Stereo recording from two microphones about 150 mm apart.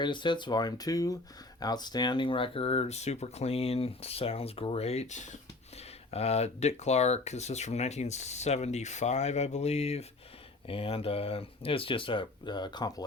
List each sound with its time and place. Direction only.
0.0 s speech: 30° left (ahead or behind)